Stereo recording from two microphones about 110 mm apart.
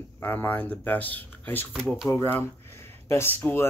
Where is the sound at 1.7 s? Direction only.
5° right (ahead or behind).